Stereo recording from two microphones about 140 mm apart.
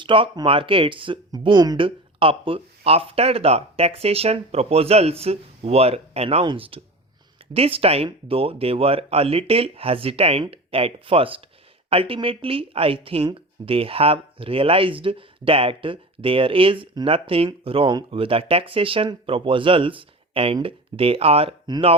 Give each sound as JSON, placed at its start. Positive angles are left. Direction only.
{"t": 0.0, "sound": "speech", "side_deg": -35}